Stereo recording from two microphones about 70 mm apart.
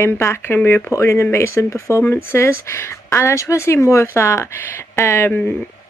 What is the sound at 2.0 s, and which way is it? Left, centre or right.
A woman's voice, left.